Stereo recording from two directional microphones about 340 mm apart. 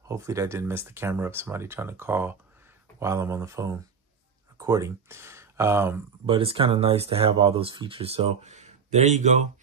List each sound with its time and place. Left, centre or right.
0.1 s speech: centre